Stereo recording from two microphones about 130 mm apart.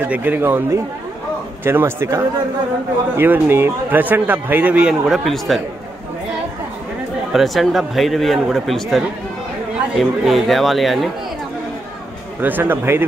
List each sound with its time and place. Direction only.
0.0 s a man's voice: 15° right (ahead or behind)
7.3 s a man's voice: centre (ahead or behind)
12.4 s a man's voice: 15° right (ahead or behind)